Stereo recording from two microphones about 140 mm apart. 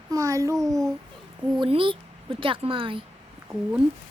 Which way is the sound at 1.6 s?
40° right (ahead or behind).